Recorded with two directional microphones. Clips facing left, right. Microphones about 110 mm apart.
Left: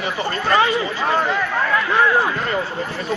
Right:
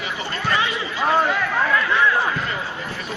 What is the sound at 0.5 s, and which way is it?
Chatter, 40° left (ahead or behind).